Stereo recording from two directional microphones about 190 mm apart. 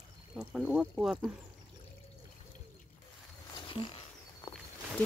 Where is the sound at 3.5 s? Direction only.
25° left (ahead or behind).